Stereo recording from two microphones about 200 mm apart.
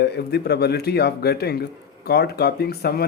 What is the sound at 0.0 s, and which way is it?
Speech, 55° left (ahead or behind).